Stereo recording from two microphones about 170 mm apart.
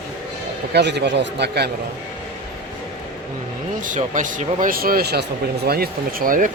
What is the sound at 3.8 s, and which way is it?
Speech, 50° right (ahead or behind).